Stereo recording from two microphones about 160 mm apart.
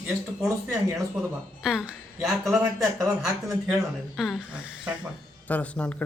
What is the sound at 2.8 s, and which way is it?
Speech, 20° right (ahead or behind).